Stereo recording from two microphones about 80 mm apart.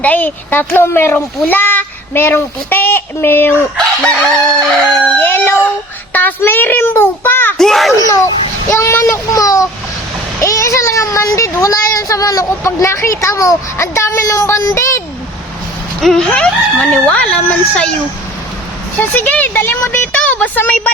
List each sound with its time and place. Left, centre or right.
0.0 s speech: centre
3.8 s chicken: centre
5.1 s a sound: left
6.1 s a child's voice: left
7.6 s a sound: centre
7.9 s speech: left
9.3 s a child's voice: left
10.4 s a sound: left
11.6 s speech: left
16.0 s speech: centre
19.1 s speech: left